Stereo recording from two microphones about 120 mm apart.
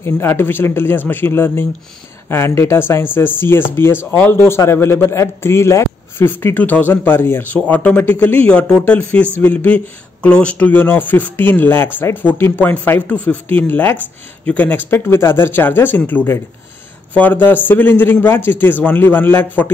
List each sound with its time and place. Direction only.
0.0 s speech: 20° left (ahead or behind)